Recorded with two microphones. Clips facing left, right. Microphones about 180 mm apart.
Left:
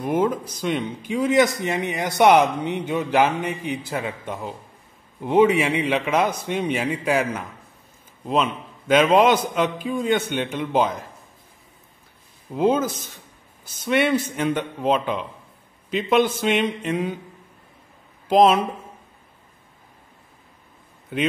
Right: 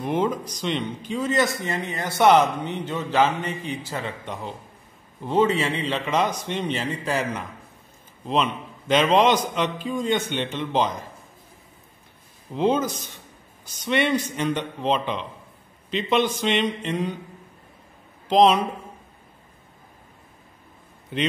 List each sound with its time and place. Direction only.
0.0 s speech: 5° left (ahead or behind)
12.5 s speech: 5° left (ahead or behind)
18.3 s speech: 5° left (ahead or behind)